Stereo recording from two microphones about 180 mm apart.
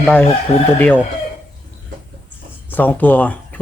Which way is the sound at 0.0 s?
10° left (ahead or behind).